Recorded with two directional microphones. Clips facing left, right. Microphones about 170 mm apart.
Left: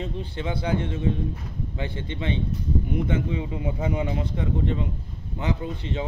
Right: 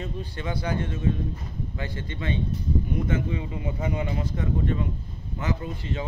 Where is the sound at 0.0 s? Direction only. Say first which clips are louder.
Left 2 dB; 20° left (ahead or behind).